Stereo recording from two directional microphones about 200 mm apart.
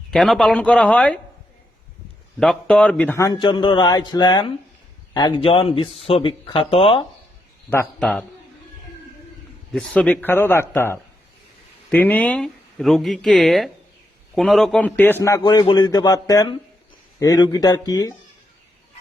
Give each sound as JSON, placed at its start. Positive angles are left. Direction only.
{"t": 0.1, "sound": "speech", "side_deg": 0}
{"t": 2.4, "sound": "a man's voice", "side_deg": 5}
{"t": 7.7, "sound": "speech", "side_deg": 5}
{"t": 9.7, "sound": "a man's voice", "side_deg": 5}